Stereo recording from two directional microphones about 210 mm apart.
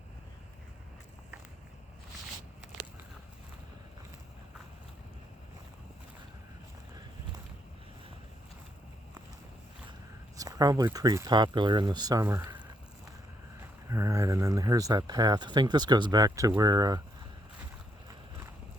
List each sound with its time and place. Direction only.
10.3 s speech: 15° right (ahead or behind)
13.9 s speech: 15° right (ahead or behind)